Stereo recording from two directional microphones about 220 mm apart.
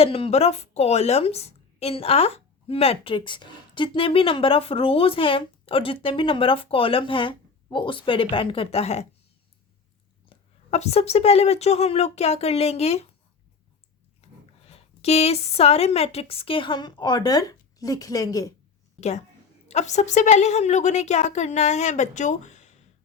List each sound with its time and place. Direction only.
0.0 s a woman's voice: 25° left (ahead or behind)
10.2 s a woman's voice: 30° left (ahead or behind)
14.2 s speech: 30° left (ahead or behind)
18.9 s a woman's voice: 30° left (ahead or behind)